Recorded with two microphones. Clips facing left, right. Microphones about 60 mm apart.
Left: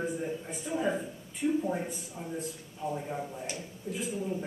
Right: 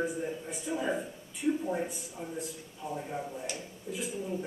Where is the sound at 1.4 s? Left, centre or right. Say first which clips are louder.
Left 1 dB; left.